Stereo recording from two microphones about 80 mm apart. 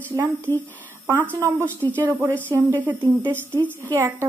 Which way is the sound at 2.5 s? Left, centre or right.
Right.